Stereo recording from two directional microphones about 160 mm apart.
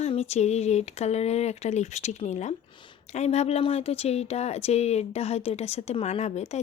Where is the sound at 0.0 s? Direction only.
40° left (ahead or behind).